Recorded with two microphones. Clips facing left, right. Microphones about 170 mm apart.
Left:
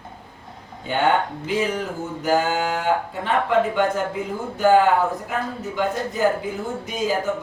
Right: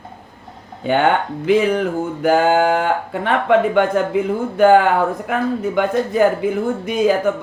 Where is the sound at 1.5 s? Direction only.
60° right (ahead or behind).